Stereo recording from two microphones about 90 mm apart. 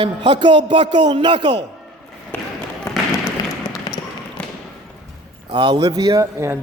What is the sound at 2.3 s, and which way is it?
Basketball bounce, 20° left (ahead or behind).